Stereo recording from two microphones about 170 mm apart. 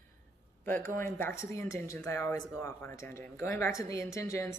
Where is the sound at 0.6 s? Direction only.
10° left (ahead or behind).